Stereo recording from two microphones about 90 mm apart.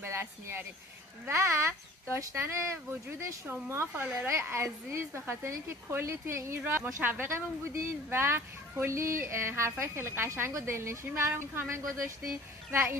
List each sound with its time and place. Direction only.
0.0 s a woman's voice: 25° right (ahead or behind)